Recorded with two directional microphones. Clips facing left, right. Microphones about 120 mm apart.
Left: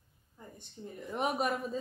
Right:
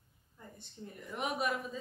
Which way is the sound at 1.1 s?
40° left (ahead or behind).